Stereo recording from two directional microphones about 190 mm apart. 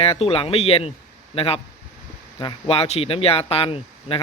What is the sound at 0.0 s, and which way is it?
Speech, 30° left (ahead or behind).